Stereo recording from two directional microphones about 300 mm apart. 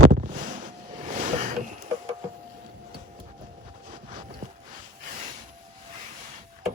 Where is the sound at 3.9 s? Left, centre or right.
Right.